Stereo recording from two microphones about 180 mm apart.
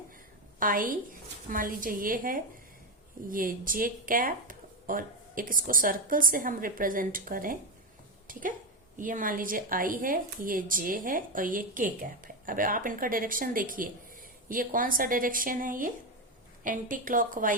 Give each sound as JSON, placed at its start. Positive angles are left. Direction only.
{"t": 0.6, "sound": "speech", "side_deg": -50}